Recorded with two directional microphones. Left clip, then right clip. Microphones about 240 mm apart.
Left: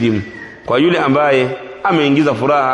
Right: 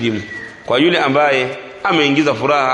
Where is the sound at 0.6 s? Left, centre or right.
Left.